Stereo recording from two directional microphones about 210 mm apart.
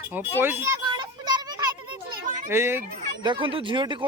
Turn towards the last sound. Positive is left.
turn(degrees=-20)  # may be behind; listen again after turning